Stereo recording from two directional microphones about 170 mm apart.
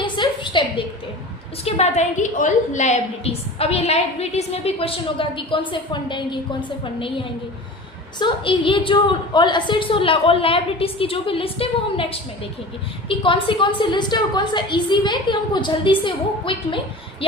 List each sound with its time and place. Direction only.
0.0 s a sound: 30° left (ahead or behind)
1.6 s a woman's voice: 40° left (ahead or behind)
8.2 s a woman's voice: 30° left (ahead or behind)